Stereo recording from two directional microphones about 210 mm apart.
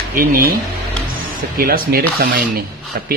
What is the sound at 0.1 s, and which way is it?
A man's voice, 45° right (ahead or behind).